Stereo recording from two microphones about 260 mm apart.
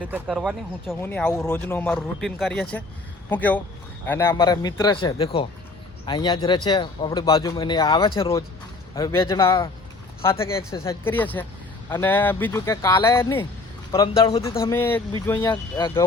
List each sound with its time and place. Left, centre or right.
0.0 s speech: centre
0.9 s speech: centre